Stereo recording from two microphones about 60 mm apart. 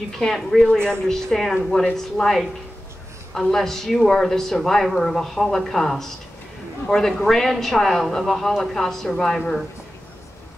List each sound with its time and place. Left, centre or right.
0.2 s a woman's voice: centre